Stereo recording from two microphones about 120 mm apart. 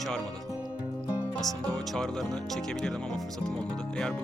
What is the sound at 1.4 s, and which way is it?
Speech, 30° right (ahead or behind).